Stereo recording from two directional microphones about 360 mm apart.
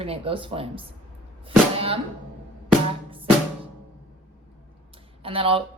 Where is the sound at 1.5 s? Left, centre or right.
Centre.